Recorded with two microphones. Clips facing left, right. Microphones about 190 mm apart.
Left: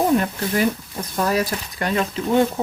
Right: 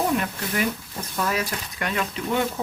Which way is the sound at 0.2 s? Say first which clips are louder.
Left 5 dB; 35° left (ahead or behind).